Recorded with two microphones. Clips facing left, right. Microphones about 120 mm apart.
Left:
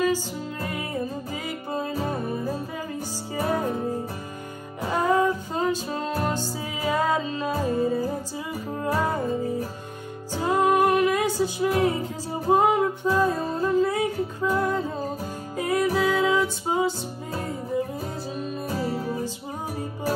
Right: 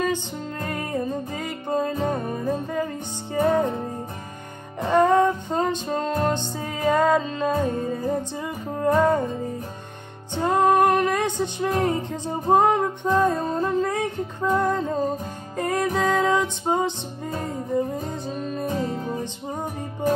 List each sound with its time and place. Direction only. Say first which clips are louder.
0.0 s music: left 1 dB; 5° left (ahead or behind)
4.8 s music: right 4 dB; 5° left (ahead or behind)
16.7 s music: right 4 dB; 40° right (ahead or behind)
17.9 s music: right 2 dB; 5° left (ahead or behind)